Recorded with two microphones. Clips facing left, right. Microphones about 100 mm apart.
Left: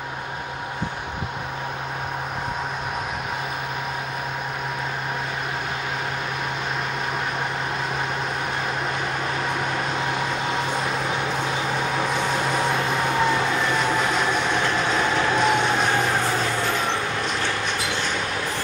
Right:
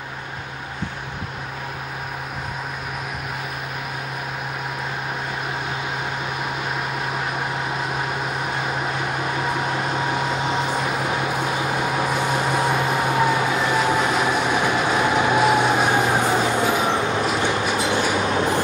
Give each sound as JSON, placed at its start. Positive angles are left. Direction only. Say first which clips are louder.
{"t": 9.9, "sound": "vehicle", "louder": "right 2 dB", "side_deg": -15}
{"t": 17.4, "sound": "train", "louder": "right 5 dB", "side_deg": -15}